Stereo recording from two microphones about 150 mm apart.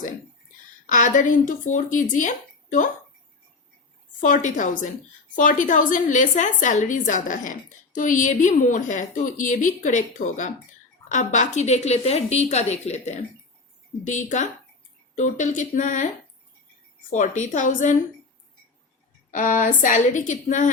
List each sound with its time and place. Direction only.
0.9 s a woman's voice: 60° left (ahead or behind)
4.2 s a woman's voice: 55° left (ahead or behind)
17.1 s a woman's voice: 55° left (ahead or behind)
19.3 s a woman's voice: 60° left (ahead or behind)